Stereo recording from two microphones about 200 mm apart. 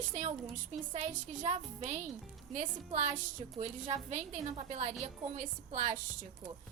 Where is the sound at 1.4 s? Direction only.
35° right (ahead or behind).